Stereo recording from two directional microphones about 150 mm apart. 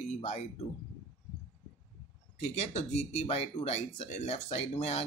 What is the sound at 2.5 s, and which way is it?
Speech, 45° left (ahead or behind).